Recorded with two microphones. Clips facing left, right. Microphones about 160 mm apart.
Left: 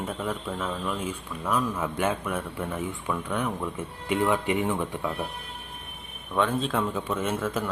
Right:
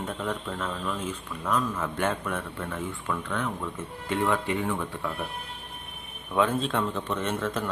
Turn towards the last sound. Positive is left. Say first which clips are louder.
# left 1 dB
turn(degrees=5)  # may be behind; listen again after turning